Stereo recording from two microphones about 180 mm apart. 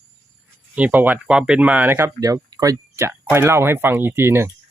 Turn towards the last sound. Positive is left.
turn(degrees=-15)  # may be behind; listen again after turning